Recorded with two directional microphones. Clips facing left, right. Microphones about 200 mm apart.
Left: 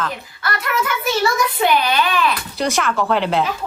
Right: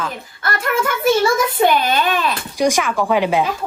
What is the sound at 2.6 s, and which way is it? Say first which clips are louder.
Speech: right 3 dB; 10° right (ahead or behind).